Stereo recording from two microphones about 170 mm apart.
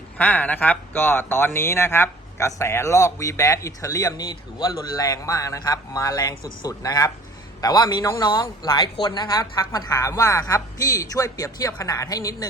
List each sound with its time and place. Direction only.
0.2 s a man's voice: 10° left (ahead or behind)